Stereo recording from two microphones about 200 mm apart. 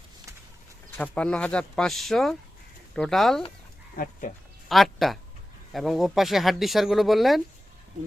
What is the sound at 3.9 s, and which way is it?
Speech, 45° left (ahead or behind).